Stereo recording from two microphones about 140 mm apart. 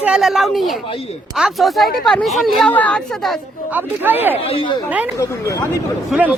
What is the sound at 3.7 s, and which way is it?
Speech, 15° right (ahead or behind).